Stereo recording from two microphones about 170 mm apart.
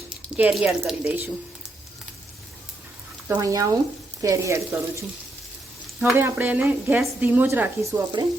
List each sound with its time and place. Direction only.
0.3 s a woman's voice: 10° right (ahead or behind)
3.2 s a woman's voice: 15° right (ahead or behind)